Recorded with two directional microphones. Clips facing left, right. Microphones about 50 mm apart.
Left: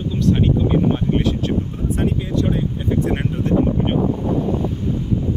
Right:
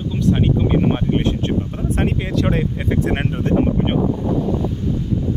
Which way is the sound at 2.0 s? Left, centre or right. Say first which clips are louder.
Even; right.